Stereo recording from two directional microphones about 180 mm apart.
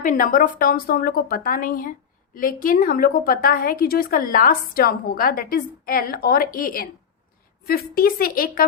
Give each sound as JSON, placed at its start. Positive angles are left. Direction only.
{"t": 0.0, "sound": "a woman's voice", "side_deg": 50}